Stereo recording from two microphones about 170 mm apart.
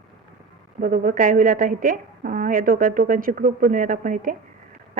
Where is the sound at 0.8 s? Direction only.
50° right (ahead or behind).